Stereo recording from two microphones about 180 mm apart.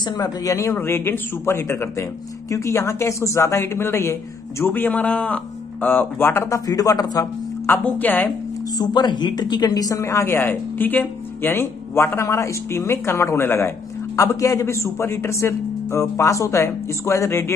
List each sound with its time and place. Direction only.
0.0 s a woman's voice: 20° left (ahead or behind)
8.7 s a woman's voice: 25° left (ahead or behind)